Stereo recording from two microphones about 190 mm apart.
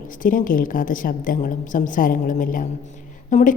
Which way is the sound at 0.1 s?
45° left (ahead or behind).